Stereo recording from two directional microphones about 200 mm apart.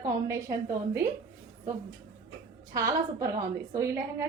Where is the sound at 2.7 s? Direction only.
15° right (ahead or behind).